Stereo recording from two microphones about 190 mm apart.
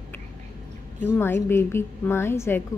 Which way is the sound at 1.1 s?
10° left (ahead or behind).